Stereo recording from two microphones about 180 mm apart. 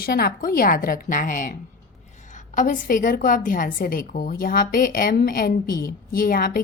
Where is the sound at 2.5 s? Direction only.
45° left (ahead or behind).